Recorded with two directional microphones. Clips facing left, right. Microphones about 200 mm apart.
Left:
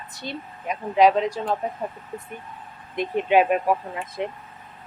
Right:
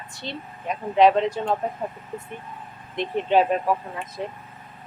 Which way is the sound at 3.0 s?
10° left (ahead or behind).